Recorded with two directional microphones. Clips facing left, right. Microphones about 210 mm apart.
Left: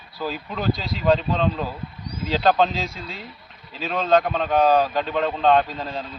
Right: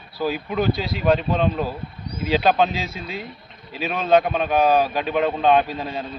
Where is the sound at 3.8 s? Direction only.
10° right (ahead or behind).